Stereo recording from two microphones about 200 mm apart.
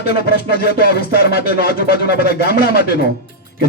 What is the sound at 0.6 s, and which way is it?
Music, 50° left (ahead or behind).